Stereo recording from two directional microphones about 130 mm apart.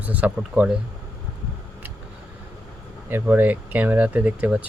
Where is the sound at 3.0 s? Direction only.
15° right (ahead or behind).